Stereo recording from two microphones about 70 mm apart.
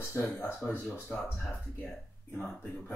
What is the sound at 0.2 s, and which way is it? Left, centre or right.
Speech, left.